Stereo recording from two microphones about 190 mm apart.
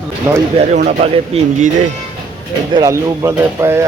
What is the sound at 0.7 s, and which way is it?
Speech, 35° right (ahead or behind).